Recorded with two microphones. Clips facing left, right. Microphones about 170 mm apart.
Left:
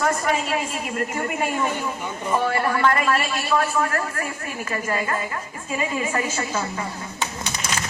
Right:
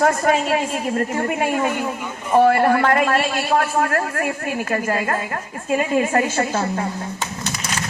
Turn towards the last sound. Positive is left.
turn(degrees=-50)  # may be behind; listen again after turning